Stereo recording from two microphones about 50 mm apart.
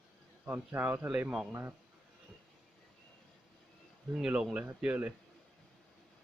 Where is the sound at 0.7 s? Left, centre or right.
Right.